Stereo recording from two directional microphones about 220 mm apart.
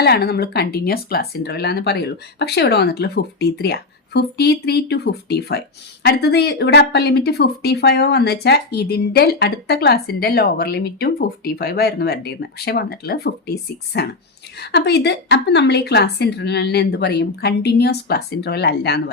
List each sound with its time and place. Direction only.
0.0 s speech: 45° left (ahead or behind)